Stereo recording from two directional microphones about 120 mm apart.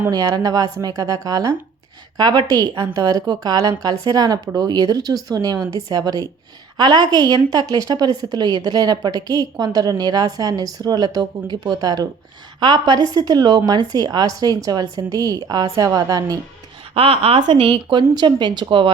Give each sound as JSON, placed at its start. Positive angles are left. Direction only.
{"t": 0.1, "sound": "a woman's voice", "side_deg": -35}
{"t": 16.9, "sound": "a woman's voice", "side_deg": -50}